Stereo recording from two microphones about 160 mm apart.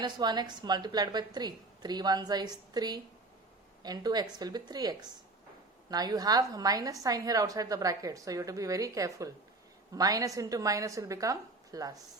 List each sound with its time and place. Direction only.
0.0 s a woman's voice: 25° right (ahead or behind)